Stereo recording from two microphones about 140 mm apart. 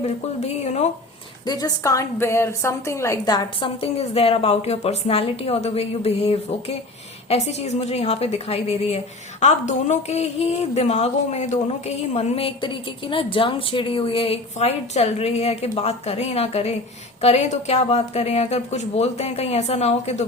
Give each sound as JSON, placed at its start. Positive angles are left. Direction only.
{"t": 0.0, "sound": "speech", "side_deg": 50}
{"t": 1.5, "sound": "speech", "side_deg": 25}